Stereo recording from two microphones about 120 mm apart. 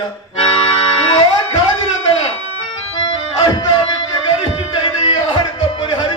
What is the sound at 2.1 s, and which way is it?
Music, 50° left (ahead or behind).